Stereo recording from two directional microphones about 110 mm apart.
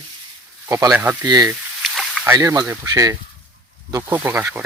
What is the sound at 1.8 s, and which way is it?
Snake, centre (ahead or behind).